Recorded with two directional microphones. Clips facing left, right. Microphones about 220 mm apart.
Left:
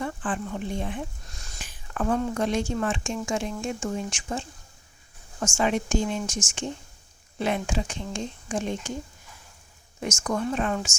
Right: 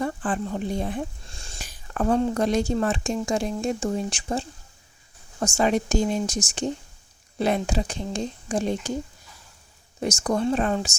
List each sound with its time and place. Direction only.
0.0 s speech: 40° right (ahead or behind)
10.0 s speech: 35° right (ahead or behind)